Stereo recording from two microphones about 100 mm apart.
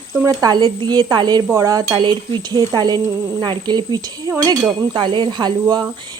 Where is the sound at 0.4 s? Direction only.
45° right (ahead or behind).